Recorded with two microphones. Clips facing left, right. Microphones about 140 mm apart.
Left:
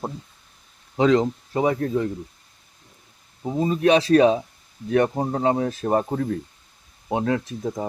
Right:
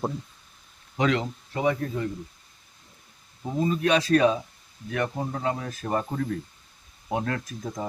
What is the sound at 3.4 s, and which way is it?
Speech, 30° left (ahead or behind).